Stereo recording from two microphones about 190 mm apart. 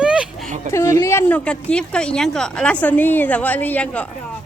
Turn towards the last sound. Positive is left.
turn(degrees=5)  # may be behind; listen again after turning